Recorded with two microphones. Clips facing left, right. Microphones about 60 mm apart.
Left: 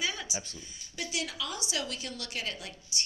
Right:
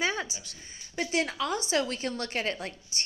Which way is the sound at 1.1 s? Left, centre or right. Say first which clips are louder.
Right 8 dB; right.